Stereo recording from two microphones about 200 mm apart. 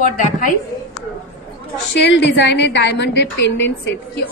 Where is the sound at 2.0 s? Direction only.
65° left (ahead or behind).